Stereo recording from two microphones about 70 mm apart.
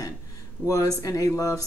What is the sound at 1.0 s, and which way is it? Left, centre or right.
Speech, left.